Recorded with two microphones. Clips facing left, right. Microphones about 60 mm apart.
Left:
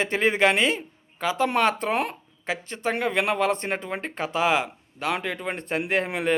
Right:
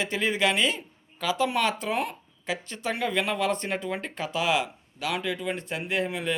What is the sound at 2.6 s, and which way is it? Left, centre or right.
Speech, left.